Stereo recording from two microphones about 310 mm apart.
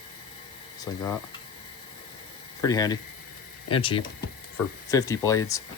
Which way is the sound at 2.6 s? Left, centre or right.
Centre.